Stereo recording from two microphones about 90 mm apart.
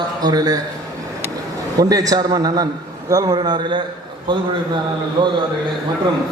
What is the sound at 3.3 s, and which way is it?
Speech, 60° right (ahead or behind).